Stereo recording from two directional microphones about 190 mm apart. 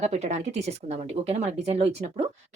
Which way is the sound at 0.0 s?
35° right (ahead or behind).